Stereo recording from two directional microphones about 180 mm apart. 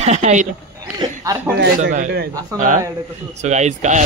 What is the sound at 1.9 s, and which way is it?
Speech, 55° right (ahead or behind).